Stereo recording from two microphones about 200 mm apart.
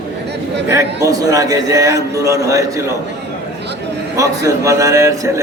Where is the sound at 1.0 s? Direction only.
15° right (ahead or behind).